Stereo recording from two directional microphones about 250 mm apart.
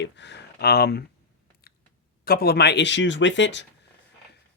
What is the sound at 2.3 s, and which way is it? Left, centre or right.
Speech, left.